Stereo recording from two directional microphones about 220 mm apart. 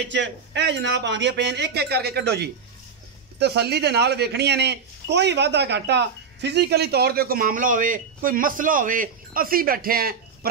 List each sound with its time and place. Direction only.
0.1 s a man's voice: 55° right (ahead or behind)